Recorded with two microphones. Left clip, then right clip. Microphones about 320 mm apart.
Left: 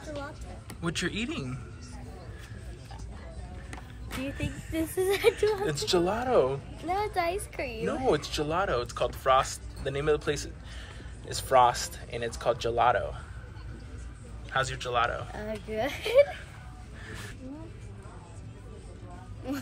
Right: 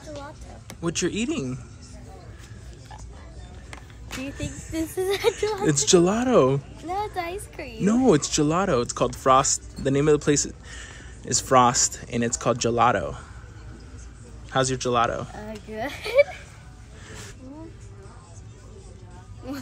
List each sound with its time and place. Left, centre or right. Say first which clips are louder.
0.7 s speech: right 5 dB; centre
4.2 s speech: right 1 dB; centre
5.7 s speech: right 8 dB; right
6.9 s speech: even; centre
7.8 s speech: right 8 dB; right
14.5 s speech: right 6 dB; centre
15.3 s speech: left 1 dB; centre
19.5 s speech: even; centre